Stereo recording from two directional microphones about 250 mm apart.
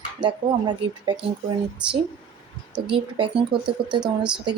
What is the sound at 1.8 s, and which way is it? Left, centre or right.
Speech, centre.